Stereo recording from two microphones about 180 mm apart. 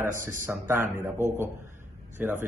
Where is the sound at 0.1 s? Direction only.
45° right (ahead or behind).